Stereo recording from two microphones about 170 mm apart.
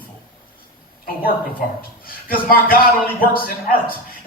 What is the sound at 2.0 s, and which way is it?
Speech, 60° left (ahead or behind).